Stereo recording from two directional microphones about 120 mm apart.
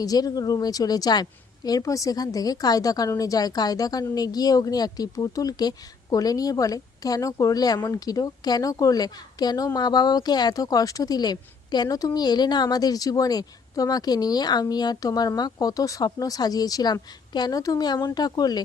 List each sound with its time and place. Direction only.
0.0 s a woman's voice: 30° left (ahead or behind)